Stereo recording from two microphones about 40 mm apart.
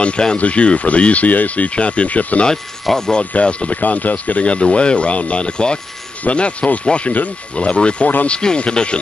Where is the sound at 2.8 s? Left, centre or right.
Centre.